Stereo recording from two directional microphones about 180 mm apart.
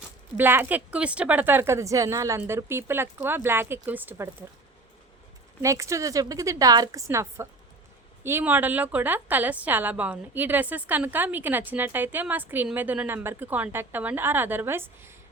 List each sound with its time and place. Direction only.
0.3 s a woman's voice: 10° right (ahead or behind)
5.6 s a woman's voice: 15° right (ahead or behind)